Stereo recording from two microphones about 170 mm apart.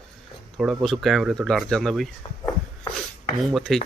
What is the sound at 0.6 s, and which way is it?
Speech, centre (ahead or behind).